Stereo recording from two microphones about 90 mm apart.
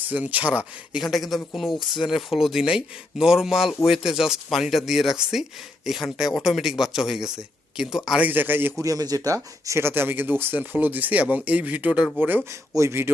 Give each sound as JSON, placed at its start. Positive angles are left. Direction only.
{"t": 0.0, "sound": "speech", "side_deg": -20}
{"t": 1.0, "sound": "speech", "side_deg": 0}
{"t": 8.2, "sound": "speech", "side_deg": -20}
{"t": 8.8, "sound": "speech", "side_deg": -40}
{"t": 12.5, "sound": "speech", "side_deg": -35}